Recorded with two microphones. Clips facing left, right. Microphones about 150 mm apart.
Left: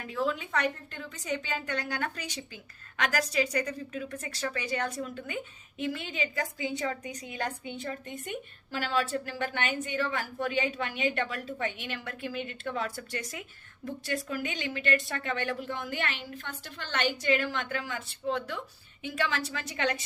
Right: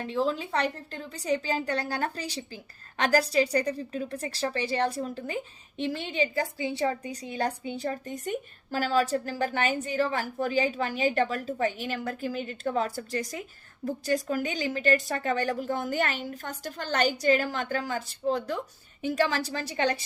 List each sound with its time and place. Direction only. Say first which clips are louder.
0.0 s a woman's voice: right 3 dB; 30° right (ahead or behind)